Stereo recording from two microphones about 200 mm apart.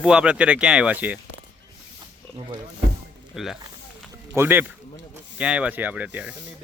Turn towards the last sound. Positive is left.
turn(degrees=-5)  # may be behind; listen again after turning